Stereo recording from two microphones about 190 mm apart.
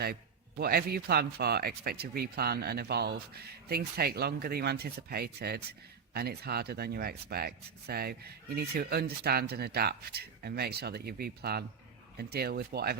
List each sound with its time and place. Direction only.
0.0 s a man's voice: 55° right (ahead or behind)